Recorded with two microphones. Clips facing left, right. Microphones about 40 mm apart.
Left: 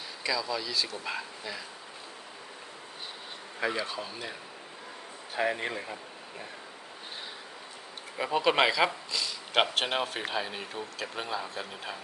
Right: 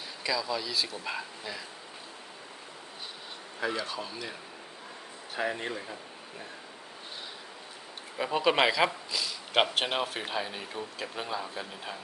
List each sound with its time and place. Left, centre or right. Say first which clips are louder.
0.2 s speech: even; centre
3.6 s speech: left 1 dB; centre
5.4 s speech: left 2 dB; centre
8.2 s speech: even; centre